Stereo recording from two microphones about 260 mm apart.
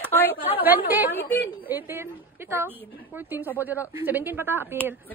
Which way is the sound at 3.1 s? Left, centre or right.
Centre.